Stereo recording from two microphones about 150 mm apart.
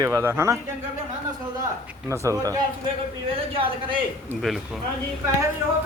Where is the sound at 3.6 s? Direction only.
35° right (ahead or behind).